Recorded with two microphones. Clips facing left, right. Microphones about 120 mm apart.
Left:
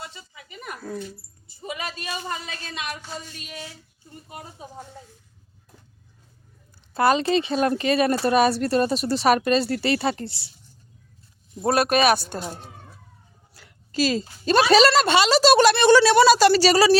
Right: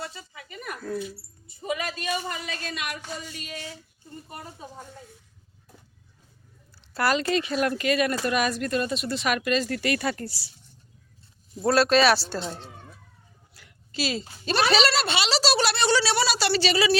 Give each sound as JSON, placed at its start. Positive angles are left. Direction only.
{"t": 0.4, "sound": "a sound", "side_deg": 20}
{"t": 1.5, "sound": "speech", "side_deg": 30}
{"t": 6.9, "sound": "speech", "side_deg": 20}
{"t": 11.6, "sound": "speech", "side_deg": 20}
{"t": 12.1, "sound": "speech", "side_deg": 55}
{"t": 12.4, "sound": "speech", "side_deg": 10}
{"t": 13.5, "sound": "a woman's voice", "side_deg": 35}